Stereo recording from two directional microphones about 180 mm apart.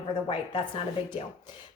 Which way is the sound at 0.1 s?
30° left (ahead or behind).